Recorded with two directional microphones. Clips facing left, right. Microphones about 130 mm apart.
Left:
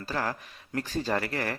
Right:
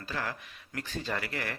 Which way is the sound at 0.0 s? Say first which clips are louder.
Left 5 dB; 40° left (ahead or behind).